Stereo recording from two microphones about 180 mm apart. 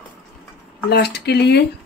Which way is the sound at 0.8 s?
65° left (ahead or behind).